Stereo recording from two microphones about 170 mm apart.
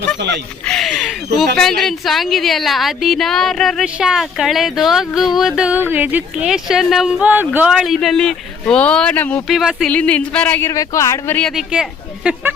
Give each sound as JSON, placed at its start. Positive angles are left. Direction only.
{"t": 0.2, "sound": "speech", "side_deg": -90}
{"t": 0.6, "sound": "a woman's voice", "side_deg": 5}
{"t": 9.5, "sound": "a woman's voice", "side_deg": 0}
{"t": 9.9, "sound": "speech", "side_deg": 10}
{"t": 11.4, "sound": "speech", "side_deg": -5}